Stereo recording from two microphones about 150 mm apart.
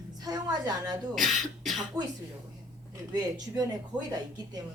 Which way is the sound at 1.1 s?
Centre (ahead or behind).